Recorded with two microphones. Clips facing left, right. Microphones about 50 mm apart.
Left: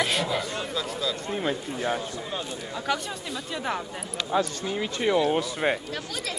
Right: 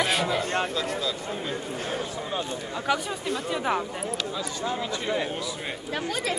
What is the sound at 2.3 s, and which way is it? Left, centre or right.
Speech, centre.